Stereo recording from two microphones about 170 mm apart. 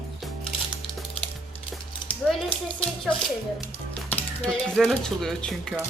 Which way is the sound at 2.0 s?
25° left (ahead or behind).